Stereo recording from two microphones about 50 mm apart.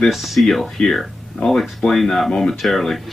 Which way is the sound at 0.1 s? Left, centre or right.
Centre.